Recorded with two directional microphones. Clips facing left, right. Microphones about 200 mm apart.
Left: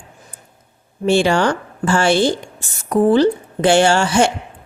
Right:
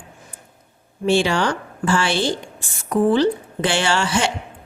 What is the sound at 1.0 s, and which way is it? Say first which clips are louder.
A woman's voice: left 3 dB; 45° left (ahead or behind).